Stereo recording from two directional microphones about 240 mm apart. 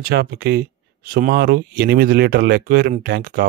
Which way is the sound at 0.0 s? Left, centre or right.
Right.